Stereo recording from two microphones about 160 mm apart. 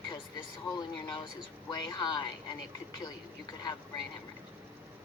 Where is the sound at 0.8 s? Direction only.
30° left (ahead or behind).